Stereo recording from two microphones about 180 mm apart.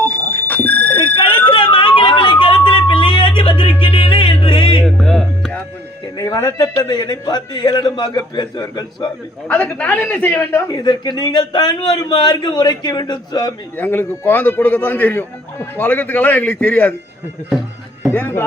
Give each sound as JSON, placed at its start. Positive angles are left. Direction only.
{"t": 0.0, "sound": "a sound", "side_deg": 10}
{"t": 0.9, "sound": "a sound", "side_deg": 30}
{"t": 4.8, "sound": "music", "side_deg": 5}
{"t": 6.1, "sound": "a man's voice", "side_deg": 20}
{"t": 9.5, "sound": "a man's voice", "side_deg": 5}
{"t": 10.7, "sound": "a man's voice", "side_deg": 25}
{"t": 13.7, "sound": "a man's voice", "side_deg": 10}
{"t": 18.1, "sound": "a man's voice", "side_deg": 10}